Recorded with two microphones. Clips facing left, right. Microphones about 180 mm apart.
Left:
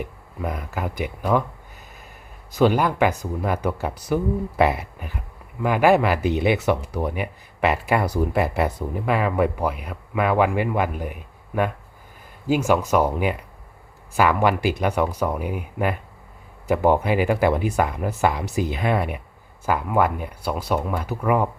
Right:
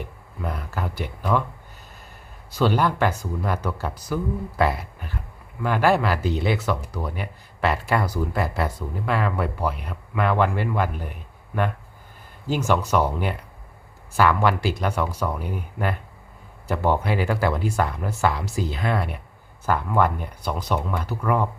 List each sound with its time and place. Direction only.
0.0 s speech: 10° left (ahead or behind)
2.6 s speech: 15° left (ahead or behind)
8.1 s speech: 25° left (ahead or behind)